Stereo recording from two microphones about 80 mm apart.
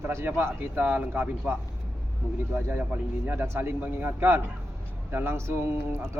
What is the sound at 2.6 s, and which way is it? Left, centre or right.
Speech, right.